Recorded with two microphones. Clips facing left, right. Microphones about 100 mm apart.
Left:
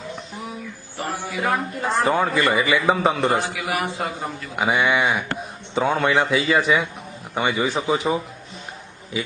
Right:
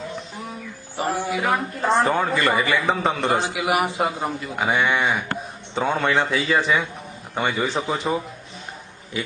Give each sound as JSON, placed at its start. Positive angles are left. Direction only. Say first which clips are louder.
{"t": 0.9, "sound": "a man's voice", "louder": "right 4 dB", "side_deg": -15}
{"t": 2.0, "sound": "a man's voice", "louder": "left 1 dB", "side_deg": 5}
{"t": 3.4, "sound": "a man's voice", "louder": "right 3 dB", "side_deg": -15}
{"t": 4.5, "sound": "a man's voice", "louder": "left 2 dB", "side_deg": 5}